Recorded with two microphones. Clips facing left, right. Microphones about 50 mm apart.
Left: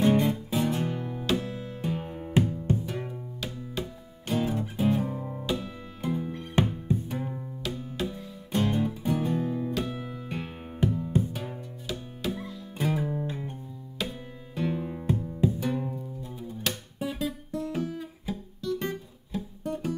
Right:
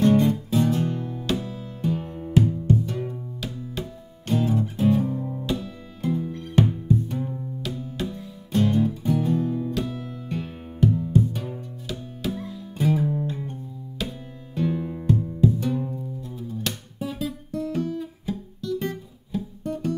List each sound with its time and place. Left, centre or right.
0.0 s music: centre
5.5 s music: centre
7.6 s music: centre